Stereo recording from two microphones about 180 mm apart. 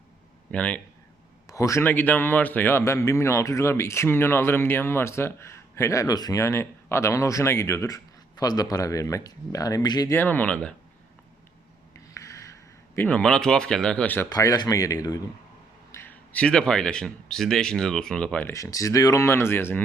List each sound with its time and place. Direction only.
0.5 s speech: 5° left (ahead or behind)
1.5 s speech: 15° left (ahead or behind)
11.9 s a sound: 15° left (ahead or behind)
13.0 s speech: 5° left (ahead or behind)
14.3 s a man's voice: 20° left (ahead or behind)